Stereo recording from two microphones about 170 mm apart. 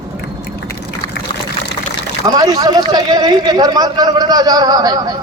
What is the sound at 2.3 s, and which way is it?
A man's voice, 20° right (ahead or behind).